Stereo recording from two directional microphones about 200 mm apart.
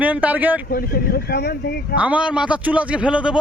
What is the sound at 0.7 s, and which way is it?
Speech, 45° left (ahead or behind).